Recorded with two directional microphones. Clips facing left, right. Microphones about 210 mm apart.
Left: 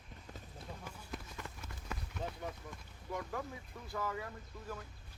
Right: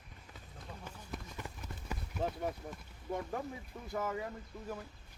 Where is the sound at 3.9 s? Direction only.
20° right (ahead or behind).